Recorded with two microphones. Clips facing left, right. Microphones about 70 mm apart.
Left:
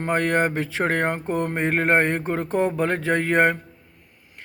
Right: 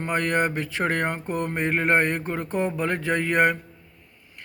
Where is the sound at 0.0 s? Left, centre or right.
Left.